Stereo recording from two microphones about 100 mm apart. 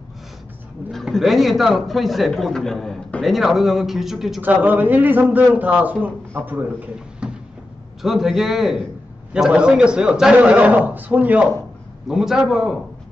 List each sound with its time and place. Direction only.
0.9 s a man's voice: centre (ahead or behind)
4.4 s a man's voice: 20° right (ahead or behind)
7.2 s a sound: 10° right (ahead or behind)
8.0 s a man's voice: 5° right (ahead or behind)
12.1 s a man's voice: 5° right (ahead or behind)